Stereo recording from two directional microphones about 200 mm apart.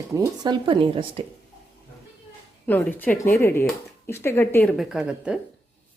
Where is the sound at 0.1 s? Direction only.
20° right (ahead or behind).